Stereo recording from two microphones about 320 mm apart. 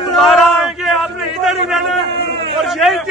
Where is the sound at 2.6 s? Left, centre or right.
Centre.